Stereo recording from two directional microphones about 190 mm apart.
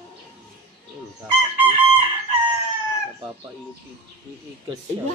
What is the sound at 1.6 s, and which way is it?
Chicken, 30° right (ahead or behind).